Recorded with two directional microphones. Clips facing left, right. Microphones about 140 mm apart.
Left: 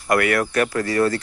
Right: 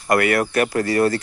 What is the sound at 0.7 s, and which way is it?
Speech, 35° right (ahead or behind).